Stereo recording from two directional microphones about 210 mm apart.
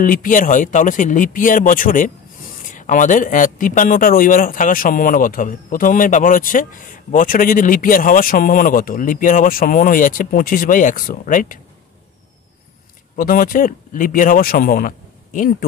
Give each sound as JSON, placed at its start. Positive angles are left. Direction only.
{"t": 0.0, "sound": "a man's voice", "side_deg": 40}
{"t": 13.1, "sound": "a man's voice", "side_deg": 40}